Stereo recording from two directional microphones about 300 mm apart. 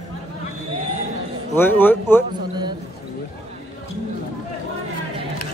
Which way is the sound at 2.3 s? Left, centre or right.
Centre.